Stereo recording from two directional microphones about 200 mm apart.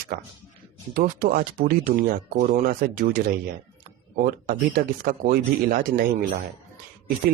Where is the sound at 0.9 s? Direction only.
45° right (ahead or behind).